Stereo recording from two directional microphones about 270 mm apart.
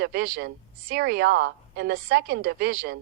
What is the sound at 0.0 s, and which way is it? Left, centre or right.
Speech, right.